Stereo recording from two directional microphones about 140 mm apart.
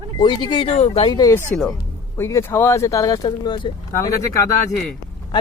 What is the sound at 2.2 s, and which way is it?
Speech, 20° left (ahead or behind).